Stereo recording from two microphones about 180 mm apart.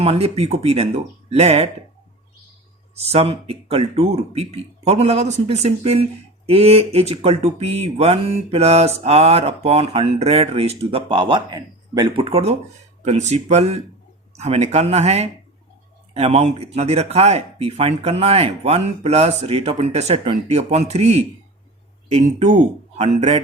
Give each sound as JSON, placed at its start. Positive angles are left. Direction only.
{"t": 0.0, "sound": "speech", "side_deg": -35}
{"t": 2.9, "sound": "speech", "side_deg": -35}